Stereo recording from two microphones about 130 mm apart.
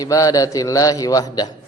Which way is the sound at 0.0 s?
25° left (ahead or behind).